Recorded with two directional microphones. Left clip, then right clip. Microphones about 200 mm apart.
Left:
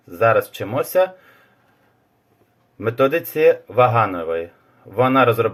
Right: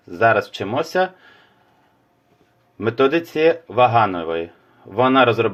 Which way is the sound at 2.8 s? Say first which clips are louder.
Even; 35° right (ahead or behind).